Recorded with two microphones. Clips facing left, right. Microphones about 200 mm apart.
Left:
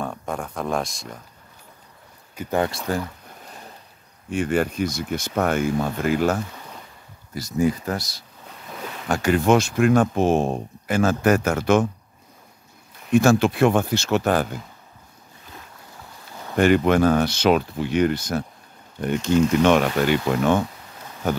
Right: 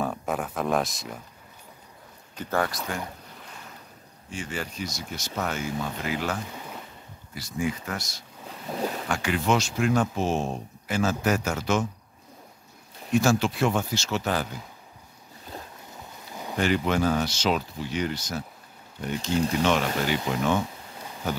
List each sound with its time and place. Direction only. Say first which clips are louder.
0.0 s speech: even; 5° right (ahead or behind)
2.3 s speech: left 4 dB; 20° left (ahead or behind)
4.3 s speech: left 12 dB; 55° left (ahead or behind); by 8.2 s 35° left (ahead or behind)
8.6 s speech: right 6 dB; 30° right (ahead or behind)
9.1 s speech: left 8 dB; 45° left (ahead or behind)
13.1 s speech: left 6 dB; 55° left (ahead or behind)
16.5 s speech: left 8 dB; 55° left (ahead or behind)